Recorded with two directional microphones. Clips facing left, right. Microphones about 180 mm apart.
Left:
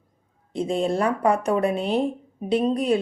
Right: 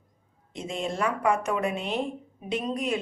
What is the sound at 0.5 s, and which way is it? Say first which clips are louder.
A woman's voice: left 8 dB; 35° left (ahead or behind).